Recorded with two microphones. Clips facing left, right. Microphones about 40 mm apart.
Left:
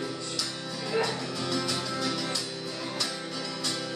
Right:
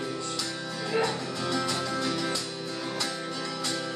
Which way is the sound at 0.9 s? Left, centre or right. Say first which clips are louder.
Right 1 dB; centre.